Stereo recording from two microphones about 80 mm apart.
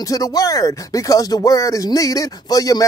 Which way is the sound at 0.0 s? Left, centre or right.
Left.